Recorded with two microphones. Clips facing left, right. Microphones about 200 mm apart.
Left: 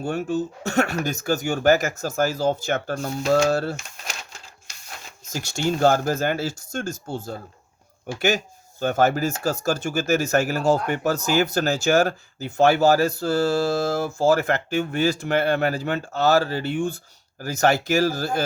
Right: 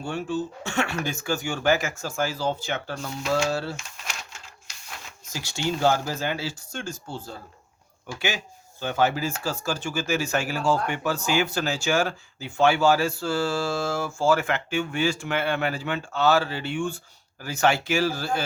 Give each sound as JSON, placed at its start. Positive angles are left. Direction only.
{"t": 0.0, "sound": "speech", "side_deg": 40}
{"t": 8.8, "sound": "speech", "side_deg": 45}